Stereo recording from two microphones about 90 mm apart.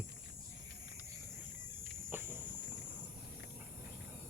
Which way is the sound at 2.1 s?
25° right (ahead or behind).